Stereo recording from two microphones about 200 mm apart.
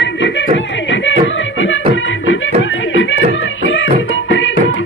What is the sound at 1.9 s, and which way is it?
Music, 75° left (ahead or behind).